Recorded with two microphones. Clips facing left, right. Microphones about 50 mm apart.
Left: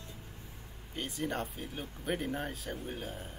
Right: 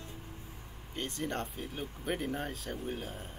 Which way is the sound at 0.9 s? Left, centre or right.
Centre.